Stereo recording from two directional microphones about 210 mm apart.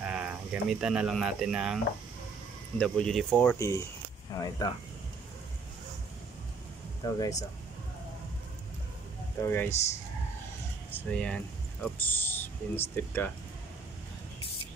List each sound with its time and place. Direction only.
0.0 s speech: 5° right (ahead or behind)
2.8 s speech: 5° left (ahead or behind)
7.1 s speech: 15° left (ahead or behind)
9.4 s speech: 10° left (ahead or behind)
10.9 s speech: 5° left (ahead or behind)